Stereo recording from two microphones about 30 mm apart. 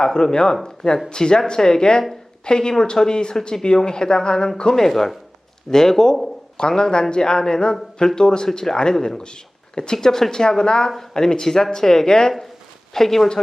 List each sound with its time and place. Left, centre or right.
0.0 s speech: left
4.7 s speech: centre